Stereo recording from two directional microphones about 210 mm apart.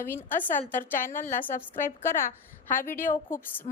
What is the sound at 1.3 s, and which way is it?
A woman's voice, 40° left (ahead or behind).